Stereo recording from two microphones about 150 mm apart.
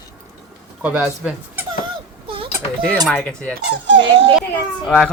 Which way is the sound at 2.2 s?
35° right (ahead or behind).